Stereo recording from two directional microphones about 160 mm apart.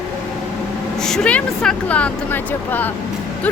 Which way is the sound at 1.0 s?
5° left (ahead or behind).